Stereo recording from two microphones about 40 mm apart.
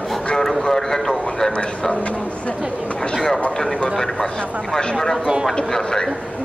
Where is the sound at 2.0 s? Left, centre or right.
Left.